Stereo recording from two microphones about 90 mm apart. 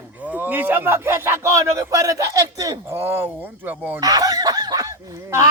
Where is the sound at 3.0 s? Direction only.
25° right (ahead or behind).